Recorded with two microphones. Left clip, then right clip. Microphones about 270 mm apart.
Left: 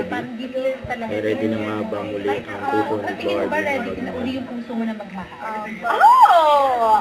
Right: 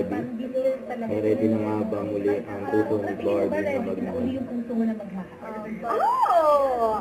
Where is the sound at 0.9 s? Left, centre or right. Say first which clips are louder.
Left 2 dB; centre.